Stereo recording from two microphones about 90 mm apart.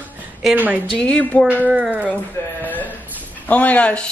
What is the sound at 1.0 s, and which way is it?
Speech, 15° left (ahead or behind).